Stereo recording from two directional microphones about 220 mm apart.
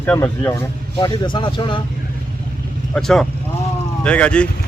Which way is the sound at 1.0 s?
20° left (ahead or behind).